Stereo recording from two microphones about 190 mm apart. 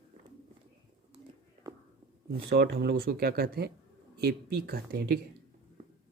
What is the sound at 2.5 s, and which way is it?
Speech, 60° right (ahead or behind).